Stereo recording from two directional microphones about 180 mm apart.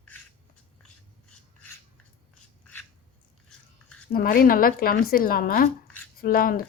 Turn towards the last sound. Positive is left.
turn(degrees=55)  # may be behind; listen again after turning